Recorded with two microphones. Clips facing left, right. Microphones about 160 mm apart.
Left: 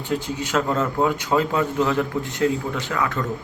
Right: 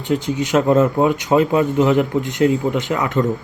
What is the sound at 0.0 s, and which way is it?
Speech, 20° right (ahead or behind).